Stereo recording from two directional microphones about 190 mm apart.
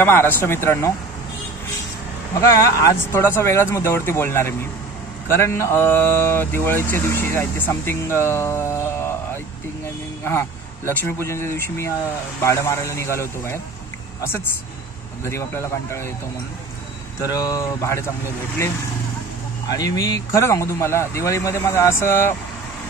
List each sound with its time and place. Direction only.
0.0 s speech: 10° left (ahead or behind)
2.5 s speech: 15° left (ahead or behind)
10.9 s speech: 10° left (ahead or behind)
14.2 s speech: 10° left (ahead or behind)
17.3 s speech: 20° left (ahead or behind)
19.7 s speech: 20° left (ahead or behind)